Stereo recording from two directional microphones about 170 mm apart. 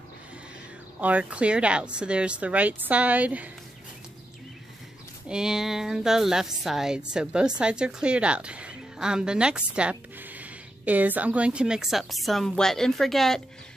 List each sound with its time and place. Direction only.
1.0 s a woman's voice: 10° right (ahead or behind)
5.3 s a woman's voice: 5° right (ahead or behind)